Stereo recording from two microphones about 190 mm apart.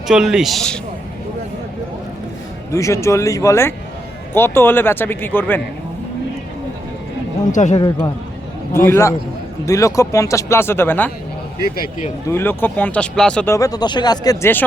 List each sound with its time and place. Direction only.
0.1 s a man's voice: 5° right (ahead or behind)
2.7 s speech: 15° left (ahead or behind)
7.5 s speech: 40° left (ahead or behind)
7.8 s a man's voice: 20° left (ahead or behind)
11.6 s a man's voice: 45° left (ahead or behind)
12.3 s speech: 10° left (ahead or behind)